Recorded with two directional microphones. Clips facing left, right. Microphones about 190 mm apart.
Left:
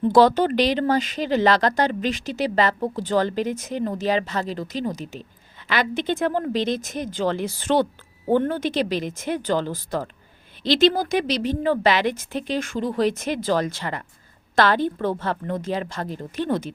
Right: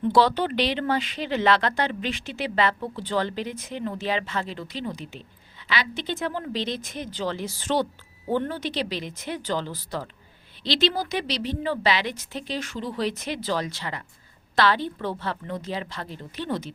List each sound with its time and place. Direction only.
0.0 s a woman's voice: 45° left (ahead or behind)